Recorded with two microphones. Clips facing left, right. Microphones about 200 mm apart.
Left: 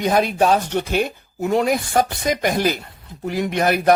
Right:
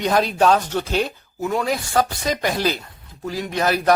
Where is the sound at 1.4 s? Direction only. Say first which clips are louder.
Left 4 dB; 25° left (ahead or behind).